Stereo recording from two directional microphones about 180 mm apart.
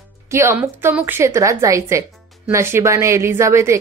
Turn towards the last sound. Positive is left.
turn(degrees=-15)  # may be behind; listen again after turning